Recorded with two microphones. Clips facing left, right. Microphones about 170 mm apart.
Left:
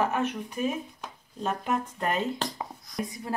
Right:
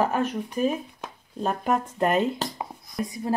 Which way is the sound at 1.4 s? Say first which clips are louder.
Right 4 dB; 40° right (ahead or behind).